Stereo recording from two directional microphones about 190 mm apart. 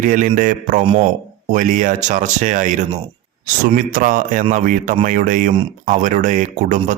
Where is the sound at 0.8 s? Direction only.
30° right (ahead or behind).